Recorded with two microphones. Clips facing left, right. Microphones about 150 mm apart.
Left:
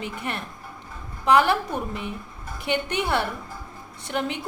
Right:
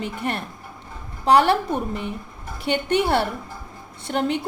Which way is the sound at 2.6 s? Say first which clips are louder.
Right 5 dB; 35° right (ahead or behind).